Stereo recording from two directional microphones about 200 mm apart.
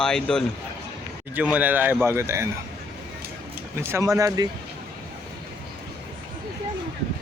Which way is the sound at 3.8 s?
15° right (ahead or behind).